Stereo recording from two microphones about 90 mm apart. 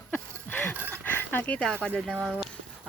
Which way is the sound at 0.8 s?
25° right (ahead or behind).